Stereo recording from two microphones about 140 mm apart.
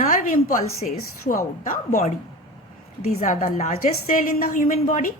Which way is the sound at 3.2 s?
65° left (ahead or behind).